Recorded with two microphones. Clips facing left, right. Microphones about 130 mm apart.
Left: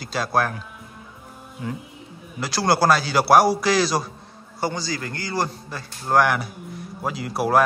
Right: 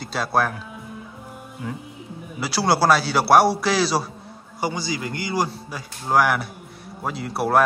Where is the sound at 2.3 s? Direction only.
5° right (ahead or behind).